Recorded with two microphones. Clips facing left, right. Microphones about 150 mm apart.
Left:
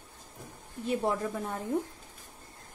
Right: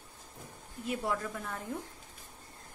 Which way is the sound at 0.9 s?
25° left (ahead or behind).